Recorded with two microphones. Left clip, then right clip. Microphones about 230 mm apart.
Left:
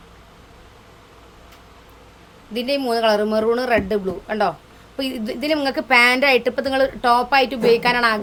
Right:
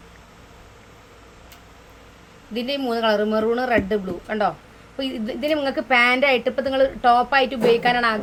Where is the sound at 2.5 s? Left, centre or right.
Left.